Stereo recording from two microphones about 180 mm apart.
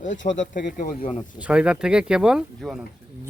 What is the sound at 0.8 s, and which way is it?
Speech, 55° left (ahead or behind).